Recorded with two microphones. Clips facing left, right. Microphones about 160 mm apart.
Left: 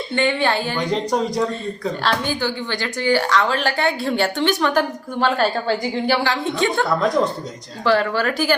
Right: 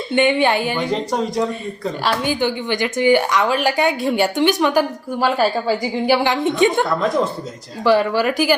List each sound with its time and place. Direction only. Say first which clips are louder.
0.1 s a woman's voice: right 4 dB; 20° right (ahead or behind)
0.8 s speech: even; 5° right (ahead or behind)
2.2 s a woman's voice: right 4 dB; 15° right (ahead or behind)
6.8 s speech: even; centre (ahead or behind)
7.9 s a woman's voice: right 3 dB; 10° right (ahead or behind)